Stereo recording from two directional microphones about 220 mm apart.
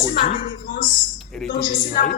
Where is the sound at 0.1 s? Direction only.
40° left (ahead or behind).